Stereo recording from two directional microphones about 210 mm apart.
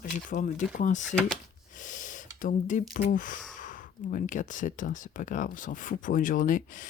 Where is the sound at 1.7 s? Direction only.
35° left (ahead or behind).